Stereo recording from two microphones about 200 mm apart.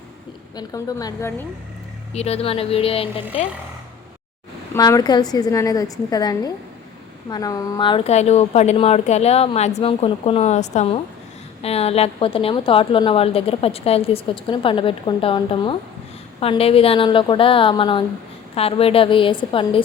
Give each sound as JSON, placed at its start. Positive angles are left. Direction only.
{"t": 0.5, "sound": "a woman's voice", "side_deg": 20}
{"t": 2.1, "sound": "a woman's voice", "side_deg": 30}
{"t": 4.7, "sound": "a woman's voice", "side_deg": 15}